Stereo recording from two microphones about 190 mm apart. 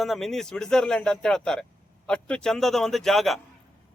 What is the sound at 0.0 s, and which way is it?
Speech, centre (ahead or behind).